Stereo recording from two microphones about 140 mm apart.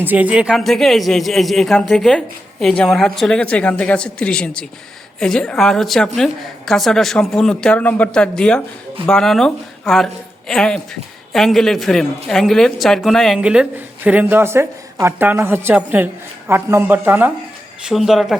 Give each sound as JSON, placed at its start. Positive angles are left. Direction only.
{"t": 0.0, "sound": "a man's voice", "side_deg": -10}
{"t": 17.8, "sound": "a man's voice", "side_deg": 0}